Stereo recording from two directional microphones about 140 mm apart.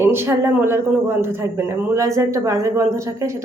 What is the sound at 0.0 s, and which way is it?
A woman's voice, 15° right (ahead or behind).